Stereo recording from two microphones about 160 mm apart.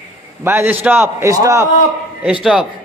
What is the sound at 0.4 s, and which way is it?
A man's voice, 15° right (ahead or behind).